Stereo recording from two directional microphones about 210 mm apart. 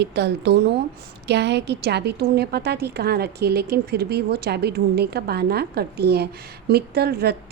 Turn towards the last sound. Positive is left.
turn(degrees=-50)  # may be behind; listen again after turning